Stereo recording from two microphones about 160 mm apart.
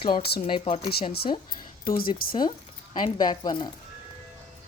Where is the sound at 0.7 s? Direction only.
40° left (ahead or behind).